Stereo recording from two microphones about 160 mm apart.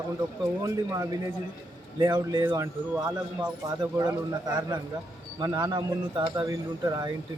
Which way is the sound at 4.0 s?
20° right (ahead or behind).